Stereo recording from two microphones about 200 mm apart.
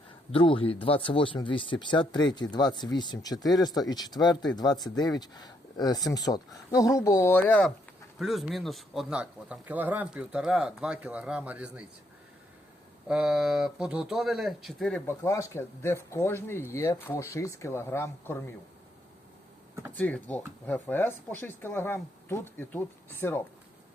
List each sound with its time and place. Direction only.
0.3 s a man's voice: 25° left (ahead or behind); by 11.9 s 5° right (ahead or behind)
13.1 s a man's voice: 5° right (ahead or behind); by 18.3 s 10° left (ahead or behind)
20.0 s speech: 10° left (ahead or behind)